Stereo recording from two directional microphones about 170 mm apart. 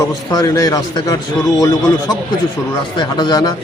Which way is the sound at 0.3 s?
20° left (ahead or behind).